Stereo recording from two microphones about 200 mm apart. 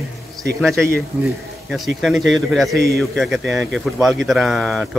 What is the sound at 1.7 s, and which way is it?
Speech, centre (ahead or behind).